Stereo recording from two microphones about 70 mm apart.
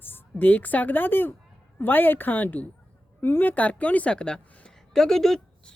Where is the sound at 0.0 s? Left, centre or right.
Left.